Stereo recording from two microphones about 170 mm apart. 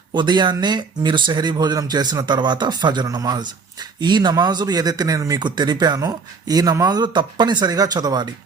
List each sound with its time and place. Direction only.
0.1 s speech: 25° right (ahead or behind)